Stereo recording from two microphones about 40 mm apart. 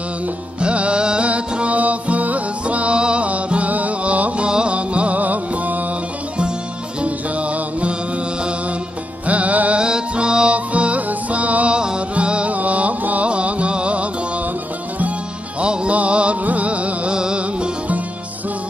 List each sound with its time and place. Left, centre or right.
0.6 s music: right
7.0 s music: right
9.2 s music: right
9.8 s music: right
15.6 s music: right